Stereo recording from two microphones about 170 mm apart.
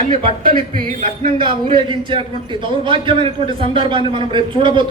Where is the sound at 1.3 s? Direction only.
30° right (ahead or behind).